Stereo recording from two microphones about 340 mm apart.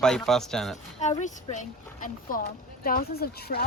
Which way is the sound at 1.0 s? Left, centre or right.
Centre.